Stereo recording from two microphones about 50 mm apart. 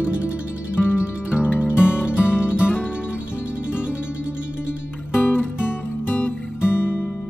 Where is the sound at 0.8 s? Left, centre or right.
Left.